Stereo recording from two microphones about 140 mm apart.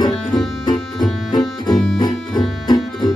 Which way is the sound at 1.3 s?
30° left (ahead or behind).